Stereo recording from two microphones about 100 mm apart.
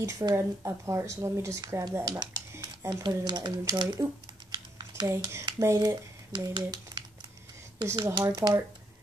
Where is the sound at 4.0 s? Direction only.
45° right (ahead or behind).